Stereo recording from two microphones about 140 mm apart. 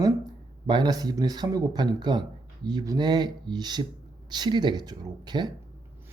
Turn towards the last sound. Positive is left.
turn(degrees=-30)  # may be behind; listen again after turning